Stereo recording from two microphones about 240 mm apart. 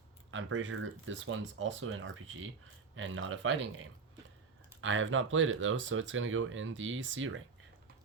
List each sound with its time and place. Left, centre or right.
0.3 s speech: right